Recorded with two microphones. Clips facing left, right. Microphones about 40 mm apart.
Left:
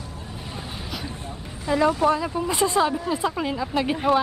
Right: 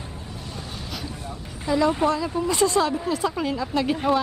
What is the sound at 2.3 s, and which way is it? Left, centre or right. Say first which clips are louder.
Speech: right 1 dB; centre.